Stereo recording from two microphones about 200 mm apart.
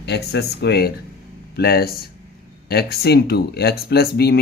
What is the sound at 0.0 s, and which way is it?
Speech, 55° left (ahead or behind).